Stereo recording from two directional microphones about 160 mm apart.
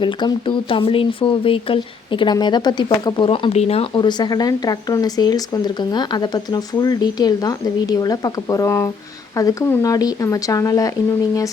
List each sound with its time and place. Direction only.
0.0 s speech: 30° left (ahead or behind)